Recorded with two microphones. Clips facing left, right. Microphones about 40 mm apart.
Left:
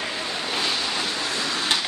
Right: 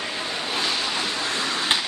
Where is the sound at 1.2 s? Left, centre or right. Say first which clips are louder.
Right 1 dB; right.